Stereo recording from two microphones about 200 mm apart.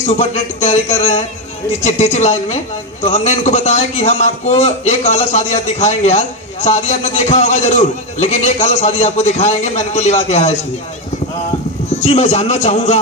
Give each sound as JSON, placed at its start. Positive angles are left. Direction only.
{"t": 0.0, "sound": "a man's voice", "side_deg": 35}
{"t": 11.9, "sound": "a man's voice", "side_deg": 35}